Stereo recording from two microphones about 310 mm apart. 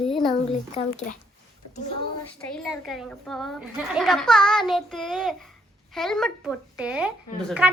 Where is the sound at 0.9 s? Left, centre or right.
Left.